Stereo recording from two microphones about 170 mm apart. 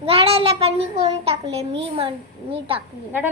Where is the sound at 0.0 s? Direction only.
35° right (ahead or behind).